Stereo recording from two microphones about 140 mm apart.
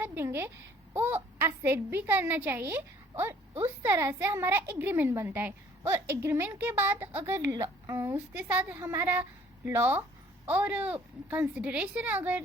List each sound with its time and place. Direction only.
0.0 s a woman's voice: 15° right (ahead or behind)